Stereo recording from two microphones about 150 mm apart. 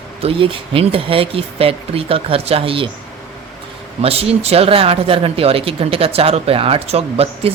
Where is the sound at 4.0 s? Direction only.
40° right (ahead or behind).